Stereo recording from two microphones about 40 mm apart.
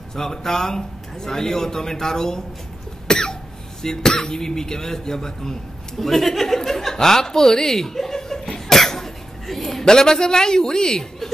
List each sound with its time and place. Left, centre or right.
0.1 s a man's voice: centre
3.1 s cough: centre
3.8 s a man's voice: centre